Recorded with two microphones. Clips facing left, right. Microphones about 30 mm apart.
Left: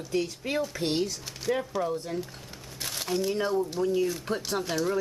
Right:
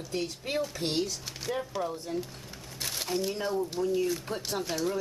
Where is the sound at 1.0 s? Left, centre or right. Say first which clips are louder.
Left 3 dB; centre.